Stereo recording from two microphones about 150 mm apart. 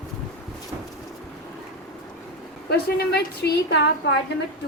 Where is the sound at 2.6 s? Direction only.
90° left.